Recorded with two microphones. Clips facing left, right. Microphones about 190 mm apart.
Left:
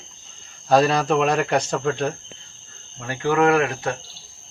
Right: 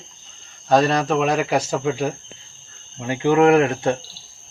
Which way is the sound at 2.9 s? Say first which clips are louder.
Right 4 dB; 20° right (ahead or behind).